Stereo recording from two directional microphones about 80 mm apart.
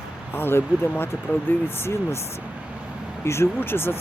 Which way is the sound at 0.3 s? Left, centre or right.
Left.